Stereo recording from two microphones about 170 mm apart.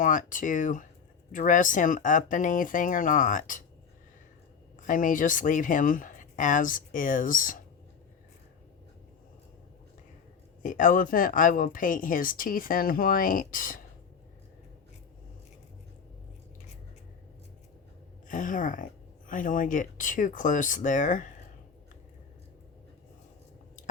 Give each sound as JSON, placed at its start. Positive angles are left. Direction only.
{"t": 0.0, "sound": "speech", "side_deg": 50}
{"t": 4.9, "sound": "speech", "side_deg": 50}
{"t": 10.6, "sound": "speech", "side_deg": 50}
{"t": 18.3, "sound": "speech", "side_deg": 50}